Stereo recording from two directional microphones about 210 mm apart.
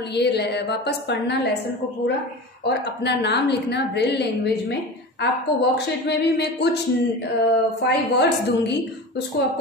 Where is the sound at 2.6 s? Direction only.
50° left (ahead or behind).